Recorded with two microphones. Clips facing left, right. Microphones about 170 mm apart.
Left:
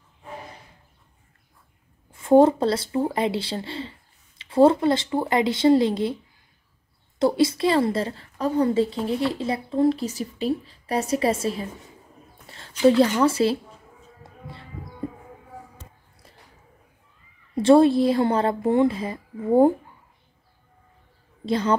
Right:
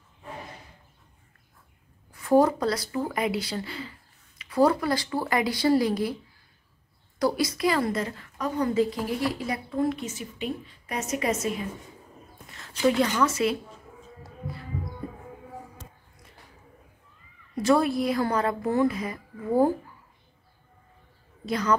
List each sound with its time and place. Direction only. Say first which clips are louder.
2.1 s a woman's voice: left 5 dB; 25° left (ahead or behind)
7.2 s a woman's voice: left 5 dB; 25° left (ahead or behind)
17.6 s a woman's voice: left 7 dB; 30° left (ahead or behind)
21.5 s a woman's voice: left 3 dB; 30° left (ahead or behind)